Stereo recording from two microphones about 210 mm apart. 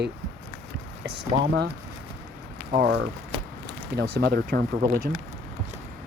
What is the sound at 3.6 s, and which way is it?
Speech, 50° right (ahead or behind).